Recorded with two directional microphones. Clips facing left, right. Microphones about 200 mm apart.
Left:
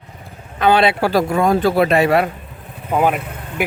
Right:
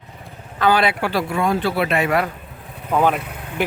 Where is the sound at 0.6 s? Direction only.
25° left (ahead or behind).